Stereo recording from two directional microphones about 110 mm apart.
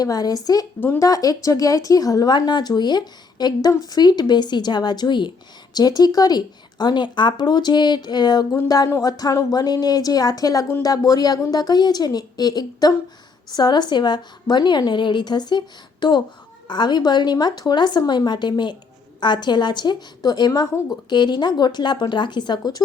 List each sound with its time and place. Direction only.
0.0 s a woman's voice: 35° left (ahead or behind)